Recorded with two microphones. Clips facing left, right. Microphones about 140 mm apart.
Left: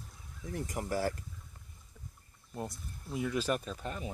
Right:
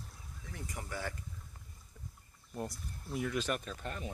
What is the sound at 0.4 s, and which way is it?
Speech, 45° left (ahead or behind).